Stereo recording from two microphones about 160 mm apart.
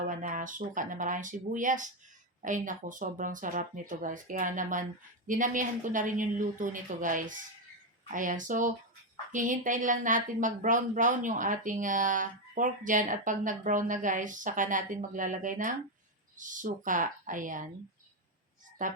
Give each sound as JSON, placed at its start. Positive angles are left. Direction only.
{"t": 0.1, "sound": "speech", "side_deg": -55}
{"t": 18.8, "sound": "speech", "side_deg": -55}